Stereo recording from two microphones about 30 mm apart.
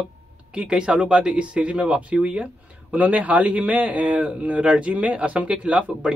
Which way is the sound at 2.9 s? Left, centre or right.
Right.